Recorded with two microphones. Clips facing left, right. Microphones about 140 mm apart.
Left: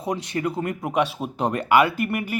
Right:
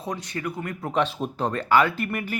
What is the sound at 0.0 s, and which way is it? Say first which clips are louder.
Speech: left 5 dB; 25° left (ahead or behind).